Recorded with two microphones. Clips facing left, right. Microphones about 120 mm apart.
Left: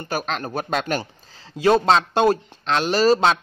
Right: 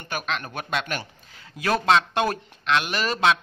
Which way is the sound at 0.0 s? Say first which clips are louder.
Left 4 dB; 35° left (ahead or behind).